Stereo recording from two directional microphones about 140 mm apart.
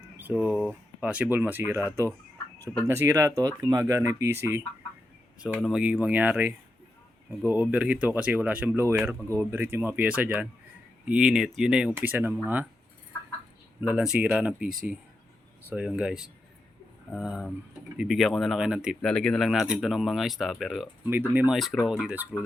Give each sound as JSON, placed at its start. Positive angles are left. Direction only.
{"t": 0.2, "sound": "speech", "side_deg": -10}
{"t": 0.6, "sound": "a sound", "side_deg": 10}
{"t": 1.0, "sound": "speech", "side_deg": -10}
{"t": 5.6, "sound": "speech", "side_deg": -5}
{"t": 7.7, "sound": "speech", "side_deg": -10}
{"t": 13.8, "sound": "speech", "side_deg": -5}
{"t": 19.0, "sound": "speech", "side_deg": 5}
{"t": 21.1, "sound": "speech", "side_deg": -15}
{"t": 21.5, "sound": "speech", "side_deg": 0}